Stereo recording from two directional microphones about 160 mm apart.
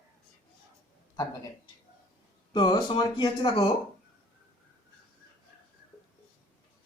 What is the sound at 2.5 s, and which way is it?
A man's voice, 30° left (ahead or behind).